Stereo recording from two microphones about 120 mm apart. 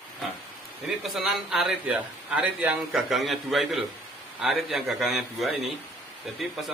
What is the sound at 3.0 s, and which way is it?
Speech, centre (ahead or behind).